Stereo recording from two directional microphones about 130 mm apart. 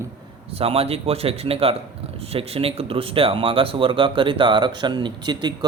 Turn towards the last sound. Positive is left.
turn(degrees=-35)  # may be behind; listen again after turning